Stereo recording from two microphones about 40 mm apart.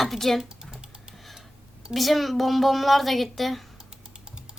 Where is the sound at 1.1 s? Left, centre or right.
Centre.